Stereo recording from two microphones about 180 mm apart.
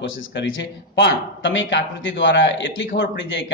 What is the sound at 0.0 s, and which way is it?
A man's voice, 90° left.